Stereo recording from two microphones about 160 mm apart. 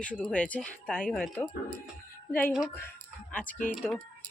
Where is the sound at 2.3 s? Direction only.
15° left (ahead or behind).